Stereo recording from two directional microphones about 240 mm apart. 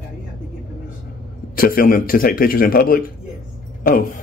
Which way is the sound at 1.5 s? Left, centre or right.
Left.